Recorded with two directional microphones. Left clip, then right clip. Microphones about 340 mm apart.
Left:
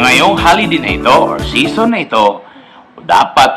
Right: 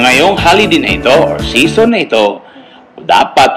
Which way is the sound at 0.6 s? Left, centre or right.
Centre.